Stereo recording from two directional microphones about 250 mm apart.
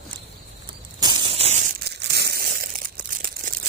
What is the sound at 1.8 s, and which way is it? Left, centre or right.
Crumpling, right.